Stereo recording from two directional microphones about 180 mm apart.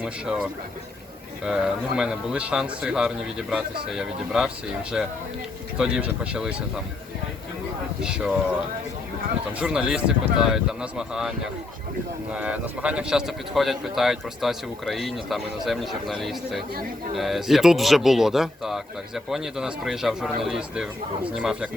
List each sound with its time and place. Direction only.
0.0 s speech: 5° right (ahead or behind)
1.5 s speech: 5° right (ahead or behind)
8.0 s speech: 5° right (ahead or behind)
9.5 s speech: 5° right (ahead or behind)